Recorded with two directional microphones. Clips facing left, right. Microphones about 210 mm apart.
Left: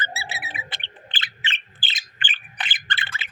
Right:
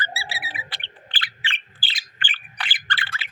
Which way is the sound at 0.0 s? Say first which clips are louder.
Even; 20° left (ahead or behind).